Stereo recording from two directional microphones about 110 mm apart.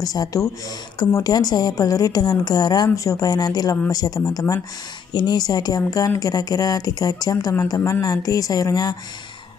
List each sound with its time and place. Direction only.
0.0 s a woman's voice: 35° left (ahead or behind)